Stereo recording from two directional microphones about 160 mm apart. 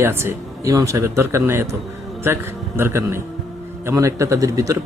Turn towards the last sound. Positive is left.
turn(degrees=-20)  # may be behind; listen again after turning